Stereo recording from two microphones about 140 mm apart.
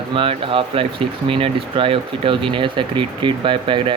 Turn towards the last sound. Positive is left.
turn(degrees=-35)  # may be behind; listen again after turning